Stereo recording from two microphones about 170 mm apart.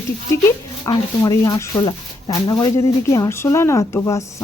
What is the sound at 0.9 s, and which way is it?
A woman's voice, 20° left (ahead or behind).